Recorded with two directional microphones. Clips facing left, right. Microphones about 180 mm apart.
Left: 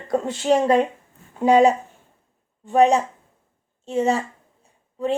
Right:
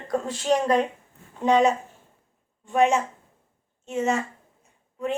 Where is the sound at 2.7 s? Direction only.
35° left (ahead or behind).